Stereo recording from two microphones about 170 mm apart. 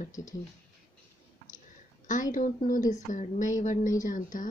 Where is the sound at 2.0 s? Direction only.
50° left (ahead or behind).